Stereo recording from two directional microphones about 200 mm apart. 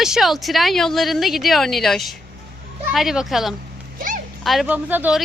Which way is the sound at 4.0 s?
45° right (ahead or behind).